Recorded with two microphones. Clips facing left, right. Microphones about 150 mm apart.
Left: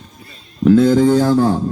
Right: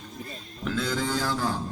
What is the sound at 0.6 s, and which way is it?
Speech, 45° left (ahead or behind).